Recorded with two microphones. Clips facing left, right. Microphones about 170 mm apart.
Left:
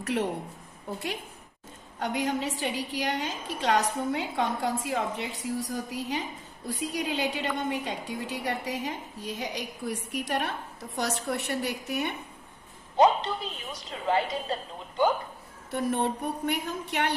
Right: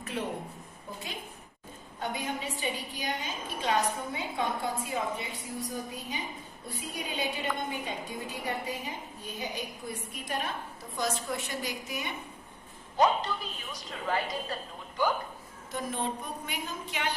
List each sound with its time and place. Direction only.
0.0 s a woman's voice: 75° left (ahead or behind)
2.0 s a woman's voice: 80° left
13.0 s a woman's voice: 25° left (ahead or behind)
15.0 s a woman's voice: 25° left (ahead or behind)
15.7 s a woman's voice: 60° left (ahead or behind)